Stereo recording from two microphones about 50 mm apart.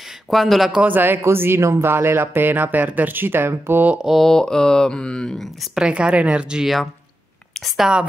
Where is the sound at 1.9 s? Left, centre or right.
Right.